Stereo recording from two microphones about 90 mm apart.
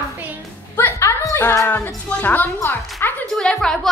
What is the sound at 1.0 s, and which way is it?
Speech, 35° left (ahead or behind).